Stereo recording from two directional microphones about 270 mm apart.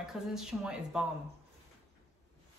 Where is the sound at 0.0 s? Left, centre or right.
Centre.